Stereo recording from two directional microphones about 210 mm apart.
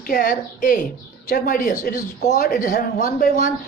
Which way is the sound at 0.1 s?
40° left (ahead or behind).